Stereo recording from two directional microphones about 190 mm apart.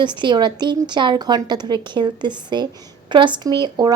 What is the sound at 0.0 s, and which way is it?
Speech, 25° right (ahead or behind).